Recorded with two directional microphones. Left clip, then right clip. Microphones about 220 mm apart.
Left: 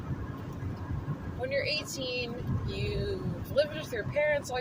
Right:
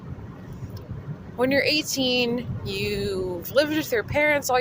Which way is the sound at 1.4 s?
50° right (ahead or behind).